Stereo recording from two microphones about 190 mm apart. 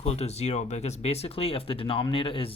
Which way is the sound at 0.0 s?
35° left (ahead or behind).